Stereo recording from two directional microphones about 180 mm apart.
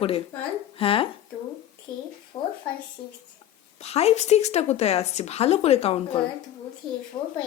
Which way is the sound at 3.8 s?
35° left (ahead or behind).